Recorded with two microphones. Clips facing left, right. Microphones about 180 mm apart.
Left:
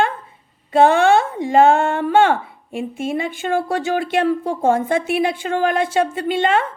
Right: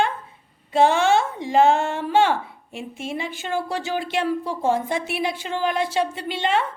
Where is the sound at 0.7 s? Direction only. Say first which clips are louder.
Left 4 dB; 55° left (ahead or behind).